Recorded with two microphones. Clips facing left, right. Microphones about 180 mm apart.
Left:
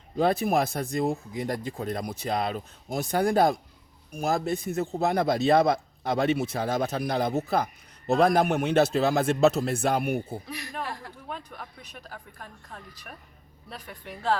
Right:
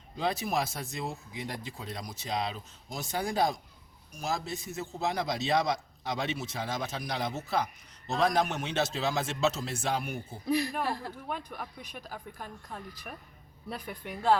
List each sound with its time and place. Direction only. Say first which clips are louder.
0.2 s a man's voice: left 7 dB; 55° left (ahead or behind)
11.3 s speech: left 1 dB; 5° right (ahead or behind)